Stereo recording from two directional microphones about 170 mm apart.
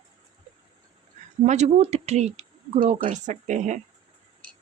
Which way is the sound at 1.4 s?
45° right (ahead or behind).